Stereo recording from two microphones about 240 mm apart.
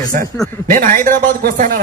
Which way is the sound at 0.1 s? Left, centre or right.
Right.